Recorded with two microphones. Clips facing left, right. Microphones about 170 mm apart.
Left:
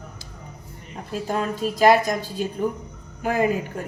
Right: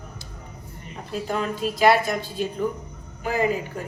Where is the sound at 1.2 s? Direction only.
40° left (ahead or behind).